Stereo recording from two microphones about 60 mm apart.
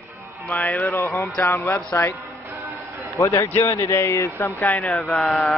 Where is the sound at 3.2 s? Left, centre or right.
Left.